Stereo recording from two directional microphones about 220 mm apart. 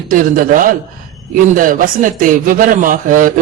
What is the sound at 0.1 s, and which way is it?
A man's voice, 40° right (ahead or behind).